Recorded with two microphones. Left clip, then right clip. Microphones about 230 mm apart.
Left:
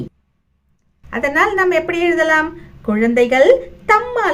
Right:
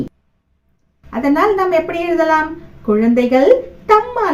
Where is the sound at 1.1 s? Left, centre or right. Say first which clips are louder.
Right 1 dB; left.